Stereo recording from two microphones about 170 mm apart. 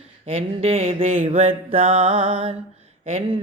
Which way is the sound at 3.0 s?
35° right (ahead or behind).